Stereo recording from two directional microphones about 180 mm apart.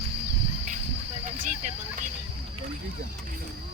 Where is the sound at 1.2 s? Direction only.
45° right (ahead or behind).